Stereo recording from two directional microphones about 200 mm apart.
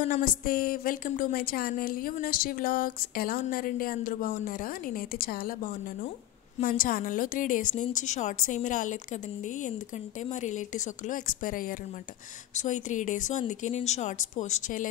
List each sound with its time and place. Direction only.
0.1 s a woman's voice: 45° left (ahead or behind)
10.2 s speech: 35° left (ahead or behind)